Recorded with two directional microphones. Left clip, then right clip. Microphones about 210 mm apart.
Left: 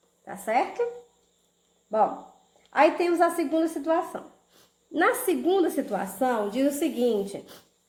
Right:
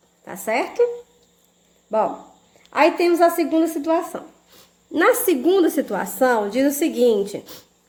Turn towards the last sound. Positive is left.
turn(degrees=-40)  # may be behind; listen again after turning